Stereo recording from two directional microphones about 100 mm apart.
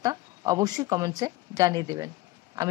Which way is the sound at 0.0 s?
40° right (ahead or behind).